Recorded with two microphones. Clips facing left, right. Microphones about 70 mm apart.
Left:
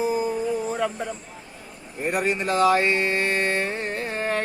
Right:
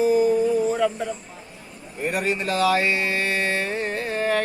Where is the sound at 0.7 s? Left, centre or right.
Centre.